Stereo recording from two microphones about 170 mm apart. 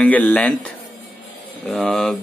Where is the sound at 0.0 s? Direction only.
10° left (ahead or behind).